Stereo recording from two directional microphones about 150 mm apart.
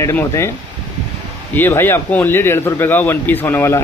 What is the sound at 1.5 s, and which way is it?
Speech, 15° left (ahead or behind).